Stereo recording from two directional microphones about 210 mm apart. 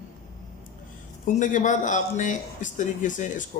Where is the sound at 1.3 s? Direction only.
35° left (ahead or behind).